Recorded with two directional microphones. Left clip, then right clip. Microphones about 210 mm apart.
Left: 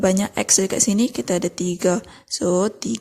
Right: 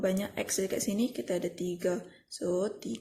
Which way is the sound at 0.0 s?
45° left (ahead or behind).